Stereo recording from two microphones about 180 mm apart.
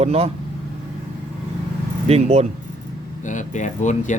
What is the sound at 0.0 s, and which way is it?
Speech, 35° right (ahead or behind).